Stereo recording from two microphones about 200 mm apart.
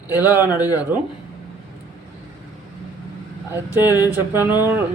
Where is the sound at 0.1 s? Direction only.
10° right (ahead or behind).